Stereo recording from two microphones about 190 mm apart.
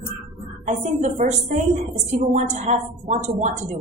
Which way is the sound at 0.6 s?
40° right (ahead or behind).